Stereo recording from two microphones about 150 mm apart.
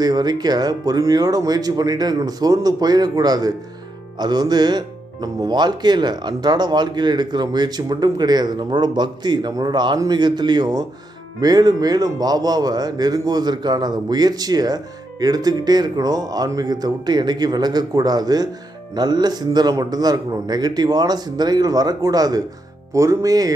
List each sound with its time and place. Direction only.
0.0 s a man's voice: 25° right (ahead or behind)